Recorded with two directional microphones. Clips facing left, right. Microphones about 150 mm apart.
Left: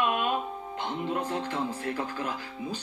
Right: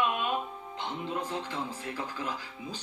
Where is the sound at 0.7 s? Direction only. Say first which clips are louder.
Left 4 dB; 50° left (ahead or behind).